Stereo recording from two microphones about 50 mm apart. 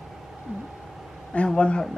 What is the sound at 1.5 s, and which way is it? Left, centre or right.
Speech, left.